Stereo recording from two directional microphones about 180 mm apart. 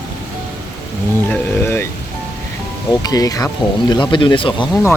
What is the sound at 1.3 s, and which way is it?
Speech, 10° left (ahead or behind).